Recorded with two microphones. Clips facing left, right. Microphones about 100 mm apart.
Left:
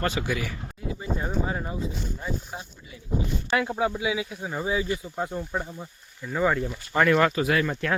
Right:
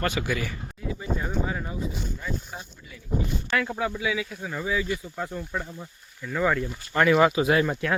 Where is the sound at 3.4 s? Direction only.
20° left (ahead or behind).